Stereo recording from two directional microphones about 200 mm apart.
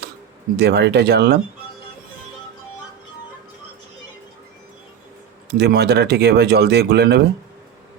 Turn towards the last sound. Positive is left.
turn(degrees=-55)  # may be behind; listen again after turning